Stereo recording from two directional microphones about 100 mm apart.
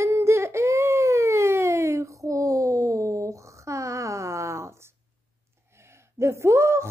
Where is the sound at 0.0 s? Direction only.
25° right (ahead or behind).